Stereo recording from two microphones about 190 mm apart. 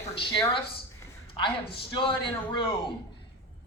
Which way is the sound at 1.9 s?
25° left (ahead or behind).